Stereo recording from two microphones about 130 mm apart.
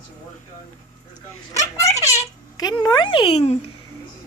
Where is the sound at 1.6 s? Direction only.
25° left (ahead or behind).